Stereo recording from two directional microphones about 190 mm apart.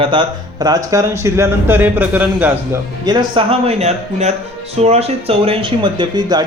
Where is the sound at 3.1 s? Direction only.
25° right (ahead or behind).